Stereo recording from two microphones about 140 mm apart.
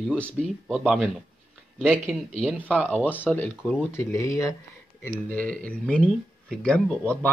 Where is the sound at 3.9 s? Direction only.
20° left (ahead or behind).